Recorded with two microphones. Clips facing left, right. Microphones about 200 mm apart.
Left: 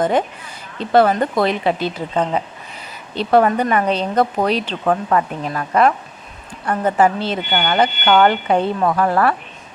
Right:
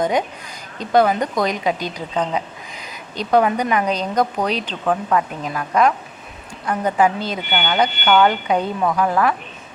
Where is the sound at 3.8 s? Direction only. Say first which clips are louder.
Left 3 dB; 30° left (ahead or behind).